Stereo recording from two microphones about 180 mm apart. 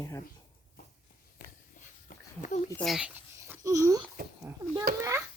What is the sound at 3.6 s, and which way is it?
A child's voice, 20° right (ahead or behind).